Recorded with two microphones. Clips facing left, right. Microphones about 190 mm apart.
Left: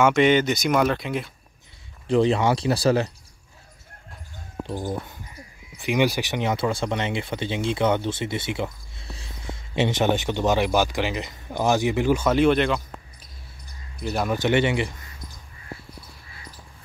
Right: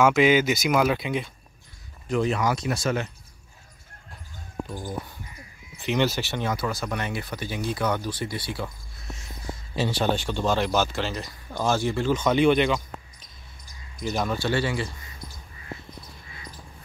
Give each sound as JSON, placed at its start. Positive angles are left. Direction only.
{"t": 0.0, "sound": "speech", "side_deg": 0}
{"t": 2.0, "sound": "speech", "side_deg": 30}
{"t": 4.6, "sound": "speech", "side_deg": 20}
{"t": 5.8, "sound": "speech", "side_deg": 10}
{"t": 14.1, "sound": "speech", "side_deg": 10}
{"t": 14.4, "sound": "speech", "side_deg": 20}